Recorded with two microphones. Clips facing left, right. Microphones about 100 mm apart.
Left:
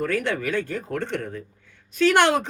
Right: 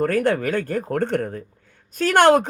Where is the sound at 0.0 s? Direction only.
45° right (ahead or behind).